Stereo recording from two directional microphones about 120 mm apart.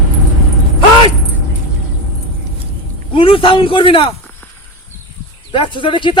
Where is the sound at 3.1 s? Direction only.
50° left (ahead or behind).